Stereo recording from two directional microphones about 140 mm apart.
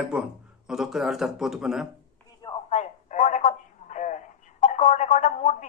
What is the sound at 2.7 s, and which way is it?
Speech, 60° left (ahead or behind).